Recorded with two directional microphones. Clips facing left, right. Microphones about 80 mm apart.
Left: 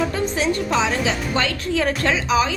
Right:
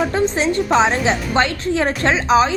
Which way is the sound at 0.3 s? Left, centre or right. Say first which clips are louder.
Right 4 dB; right.